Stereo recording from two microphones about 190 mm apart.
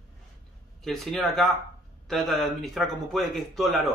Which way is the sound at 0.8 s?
Centre (ahead or behind).